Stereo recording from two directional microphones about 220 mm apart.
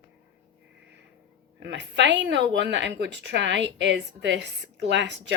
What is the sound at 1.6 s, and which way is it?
Speech, 55° right (ahead or behind).